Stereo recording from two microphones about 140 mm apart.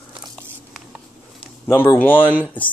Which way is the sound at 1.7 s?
15° left (ahead or behind).